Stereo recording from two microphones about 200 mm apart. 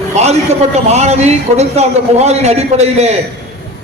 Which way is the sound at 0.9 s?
35° right (ahead or behind).